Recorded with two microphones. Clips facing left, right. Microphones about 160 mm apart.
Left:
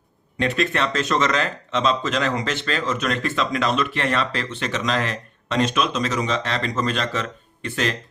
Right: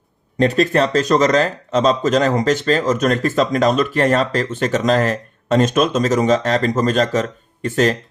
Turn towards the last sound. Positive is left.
turn(degrees=-45)  # may be behind; listen again after turning